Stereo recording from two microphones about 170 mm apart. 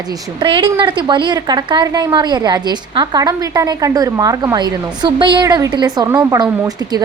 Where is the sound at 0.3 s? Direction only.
30° right (ahead or behind).